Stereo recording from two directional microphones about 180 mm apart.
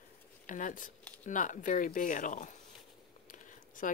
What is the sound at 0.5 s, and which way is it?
Speech, 45° left (ahead or behind).